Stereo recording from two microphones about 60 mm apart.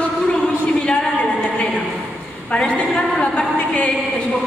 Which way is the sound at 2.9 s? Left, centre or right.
Centre.